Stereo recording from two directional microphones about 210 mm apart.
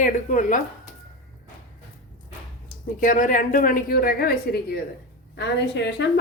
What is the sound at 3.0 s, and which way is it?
A woman's voice, 40° left (ahead or behind).